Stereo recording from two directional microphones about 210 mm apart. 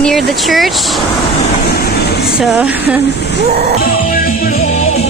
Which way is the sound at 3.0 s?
55° left (ahead or behind).